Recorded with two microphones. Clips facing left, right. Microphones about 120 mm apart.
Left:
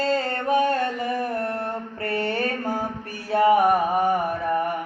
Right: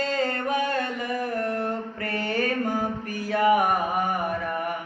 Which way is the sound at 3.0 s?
30° left (ahead or behind).